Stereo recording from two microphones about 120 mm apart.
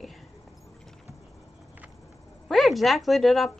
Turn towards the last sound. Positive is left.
turn(degrees=0)  # may be behind; listen again after turning